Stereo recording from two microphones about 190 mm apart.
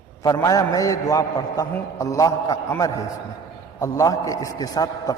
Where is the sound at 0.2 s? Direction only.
20° left (ahead or behind).